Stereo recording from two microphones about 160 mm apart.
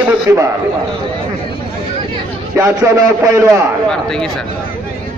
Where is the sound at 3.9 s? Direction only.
5° left (ahead or behind).